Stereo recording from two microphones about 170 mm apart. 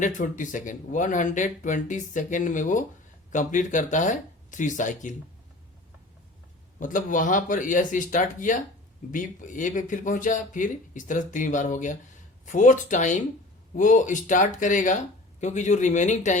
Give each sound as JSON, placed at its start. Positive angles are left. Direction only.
{"t": 0.0, "sound": "speech", "side_deg": 50}
{"t": 6.7, "sound": "speech", "side_deg": 50}